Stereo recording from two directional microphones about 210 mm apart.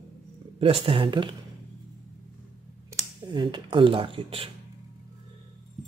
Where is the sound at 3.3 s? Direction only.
20° right (ahead or behind).